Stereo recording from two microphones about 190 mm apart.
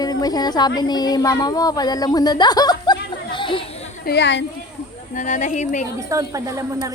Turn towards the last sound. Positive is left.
turn(degrees=-15)  # may be behind; listen again after turning